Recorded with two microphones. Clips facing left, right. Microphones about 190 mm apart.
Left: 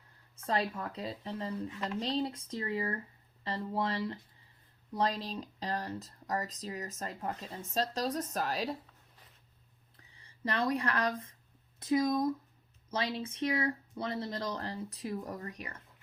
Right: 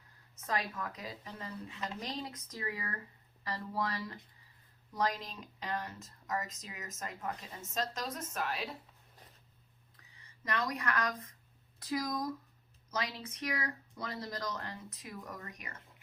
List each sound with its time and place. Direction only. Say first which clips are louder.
0.4 s speech: left 4 dB; 30° left (ahead or behind)
10.0 s speech: left 13 dB; 30° left (ahead or behind)